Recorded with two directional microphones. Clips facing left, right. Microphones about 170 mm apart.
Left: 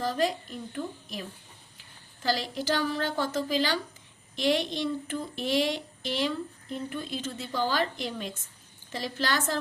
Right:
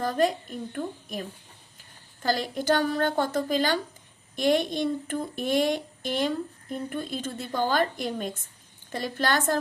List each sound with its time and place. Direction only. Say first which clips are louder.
0.0 s speech: right 3 dB; 50° right (ahead or behind)
2.2 s speech: right 3 dB; 50° right (ahead or behind)